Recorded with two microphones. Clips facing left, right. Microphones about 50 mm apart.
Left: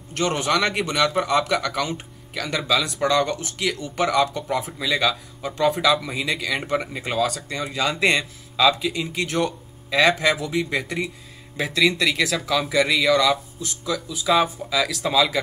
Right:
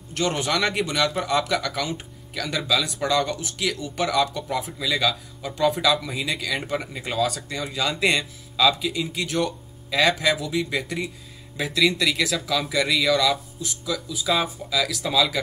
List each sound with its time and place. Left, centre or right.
0.1 s a man's voice: centre
4.3 s speech: left
5.7 s speech: centre
6.0 s speech: centre
7.2 s a man's voice: centre
7.5 s speech: centre
11.5 s a man's voice: centre